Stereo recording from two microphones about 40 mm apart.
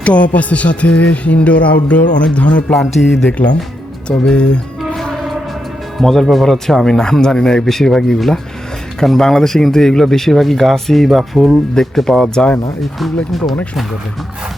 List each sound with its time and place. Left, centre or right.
0.0 s speech: left
3.0 s speech: centre
3.2 s speech: left
4.1 s speech: left
6.0 s speech: centre
11.7 s speech: centre
13.3 s speech: centre